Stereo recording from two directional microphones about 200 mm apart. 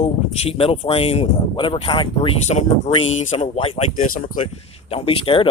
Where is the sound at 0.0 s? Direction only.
30° left (ahead or behind).